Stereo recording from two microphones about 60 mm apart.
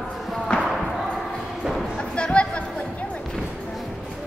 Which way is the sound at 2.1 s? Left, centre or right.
Centre.